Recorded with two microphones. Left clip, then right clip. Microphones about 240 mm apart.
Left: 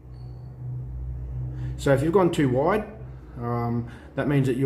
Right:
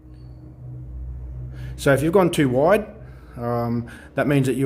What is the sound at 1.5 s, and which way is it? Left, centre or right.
Speech, right.